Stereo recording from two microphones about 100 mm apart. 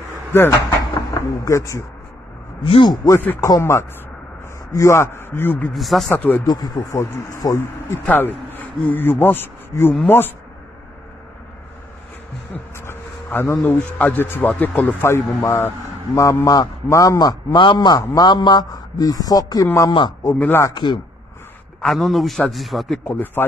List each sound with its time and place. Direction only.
0.3 s a man's voice: 25° left (ahead or behind)
2.6 s a man's voice: 65° left (ahead or behind)
3.1 s speech: 30° left (ahead or behind)
5.8 s a man's voice: centre (ahead or behind)
6.1 s speech: 20° left (ahead or behind)
6.4 s a man's voice: 40° left (ahead or behind)
8.0 s speech: 20° left (ahead or behind)
12.7 s a man's voice: 25° left (ahead or behind)
20.3 s speech: 15° left (ahead or behind)
20.7 s speech: 50° left (ahead or behind)
21.8 s a man's voice: centre (ahead or behind)
23.0 s speech: 20° left (ahead or behind)